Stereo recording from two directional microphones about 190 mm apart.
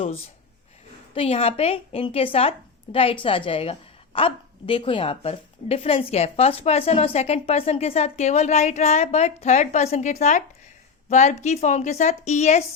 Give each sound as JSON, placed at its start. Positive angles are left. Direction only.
{"t": 1.1, "sound": "a woman's voice", "side_deg": 30}